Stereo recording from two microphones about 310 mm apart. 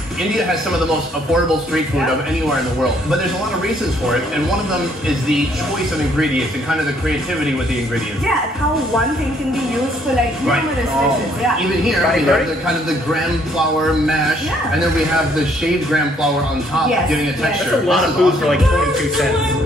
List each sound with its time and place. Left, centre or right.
11.9 s a man's voice: centre
17.4 s a man's voice: centre